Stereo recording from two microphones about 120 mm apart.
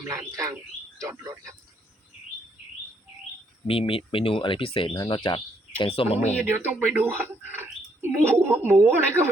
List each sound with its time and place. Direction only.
0.1 s speech: 25° right (ahead or behind)
3.7 s speech: 50° left (ahead or behind)
6.4 s speech: 15° right (ahead or behind)